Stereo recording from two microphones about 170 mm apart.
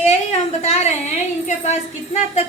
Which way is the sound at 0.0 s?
40° left (ahead or behind).